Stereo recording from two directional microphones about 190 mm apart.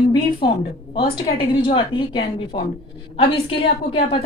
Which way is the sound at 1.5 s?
25° left (ahead or behind).